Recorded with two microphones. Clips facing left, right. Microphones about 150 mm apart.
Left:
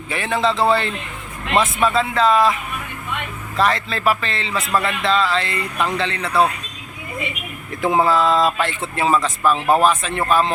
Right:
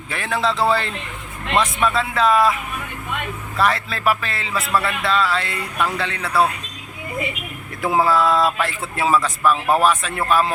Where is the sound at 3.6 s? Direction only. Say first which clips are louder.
Left 1 dB; 5° right (ahead or behind).